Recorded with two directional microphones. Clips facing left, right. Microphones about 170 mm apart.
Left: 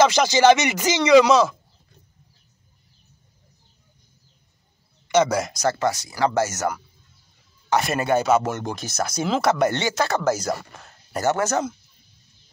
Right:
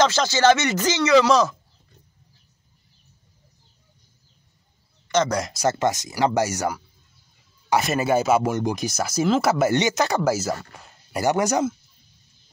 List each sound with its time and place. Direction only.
0.0 s speech: 15° left (ahead or behind)
5.0 s speech: 10° left (ahead or behind)
5.7 s speech: 20° right (ahead or behind)